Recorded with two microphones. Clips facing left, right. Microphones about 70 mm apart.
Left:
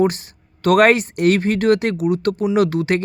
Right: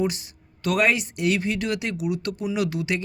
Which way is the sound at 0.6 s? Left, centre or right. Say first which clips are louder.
Left 9 dB; left.